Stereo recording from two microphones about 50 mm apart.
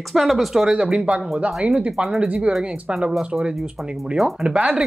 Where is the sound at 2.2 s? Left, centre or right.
Right.